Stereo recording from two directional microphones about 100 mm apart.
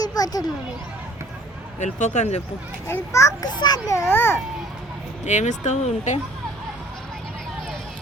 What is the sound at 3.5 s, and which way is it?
Speech, 45° left (ahead or behind).